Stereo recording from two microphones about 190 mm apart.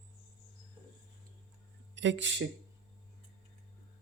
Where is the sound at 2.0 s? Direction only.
70° right (ahead or behind).